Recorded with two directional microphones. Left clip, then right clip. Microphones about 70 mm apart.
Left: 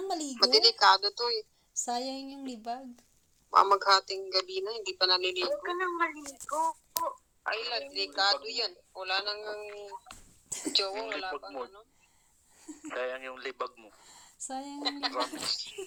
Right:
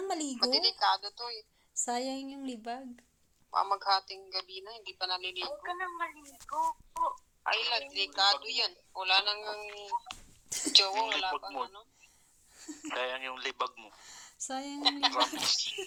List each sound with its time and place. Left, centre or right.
0.0 s a sound: centre
0.3 s speech: left
1.8 s speech: centre
3.5 s speech: left
7.4 s speech: centre
9.0 s speech: centre
12.5 s a sound: centre
12.9 s speech: centre
14.0 s speech: centre
15.0 s speech: centre